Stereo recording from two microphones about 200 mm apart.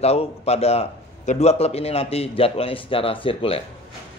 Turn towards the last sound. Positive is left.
turn(degrees=25)  # may be behind; listen again after turning